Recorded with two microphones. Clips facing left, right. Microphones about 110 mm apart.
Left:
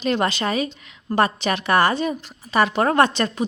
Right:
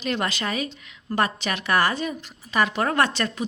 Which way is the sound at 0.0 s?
30° left (ahead or behind).